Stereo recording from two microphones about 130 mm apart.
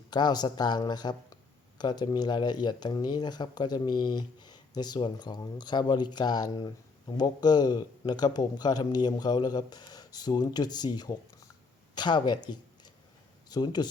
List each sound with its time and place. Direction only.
0.1 s speech: 30° left (ahead or behind)